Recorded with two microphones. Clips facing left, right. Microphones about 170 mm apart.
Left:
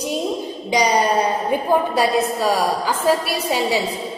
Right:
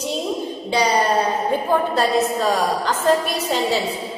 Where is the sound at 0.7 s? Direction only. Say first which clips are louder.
Left 1 dB; 15° left (ahead or behind).